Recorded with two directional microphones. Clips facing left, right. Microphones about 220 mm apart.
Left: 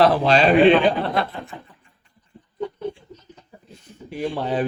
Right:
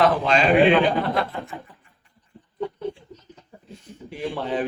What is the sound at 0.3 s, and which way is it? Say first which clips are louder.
Speech: left 3 dB; 35° left (ahead or behind).